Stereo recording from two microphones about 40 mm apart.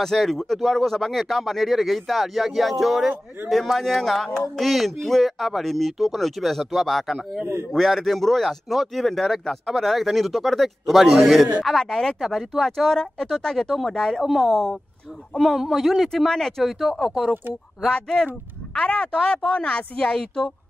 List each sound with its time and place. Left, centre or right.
0.0 s a man's voice: centre
11.7 s a man's voice: centre
16.1 s speech: centre
17.0 s a man's voice: centre
18.8 s speech: left